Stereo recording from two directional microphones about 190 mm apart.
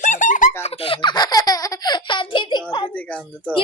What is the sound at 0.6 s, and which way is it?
Baby laughter, 30° left (ahead or behind).